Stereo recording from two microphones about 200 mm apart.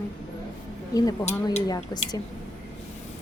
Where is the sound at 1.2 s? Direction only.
20° left (ahead or behind).